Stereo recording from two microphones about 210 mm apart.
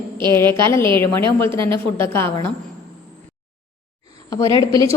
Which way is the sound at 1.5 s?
25° right (ahead or behind).